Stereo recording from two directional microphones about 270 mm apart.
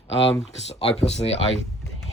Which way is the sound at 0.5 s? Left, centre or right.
Left.